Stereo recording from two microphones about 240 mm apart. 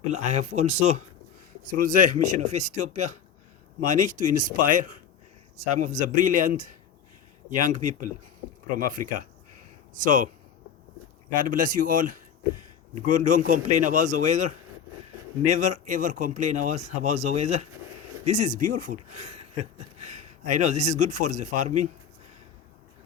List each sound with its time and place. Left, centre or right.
0.1 s a man's voice: right
11.3 s a man's voice: right